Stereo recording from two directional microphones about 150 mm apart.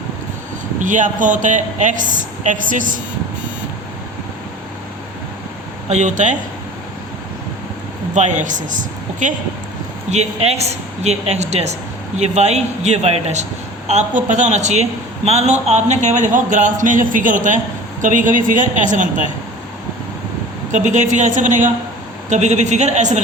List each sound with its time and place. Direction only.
0.8 s a woman's voice: 60° right (ahead or behind)
5.9 s speech: 50° right (ahead or behind)
8.1 s a woman's voice: 55° right (ahead or behind)
10.1 s a woman's voice: 45° right (ahead or behind)
20.7 s speech: 55° right (ahead or behind)